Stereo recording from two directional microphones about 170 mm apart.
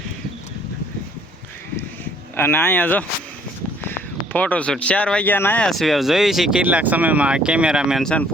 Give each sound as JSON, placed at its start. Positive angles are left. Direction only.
{"t": 2.3, "sound": "speech", "side_deg": 15}